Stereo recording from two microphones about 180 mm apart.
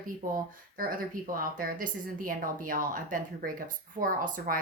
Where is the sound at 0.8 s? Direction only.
50° right (ahead or behind).